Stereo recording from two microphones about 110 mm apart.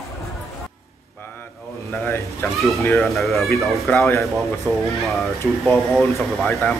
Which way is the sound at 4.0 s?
25° left (ahead or behind).